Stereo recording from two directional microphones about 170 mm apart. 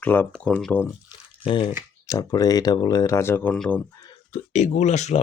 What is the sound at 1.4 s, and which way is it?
Speech, 30° left (ahead or behind).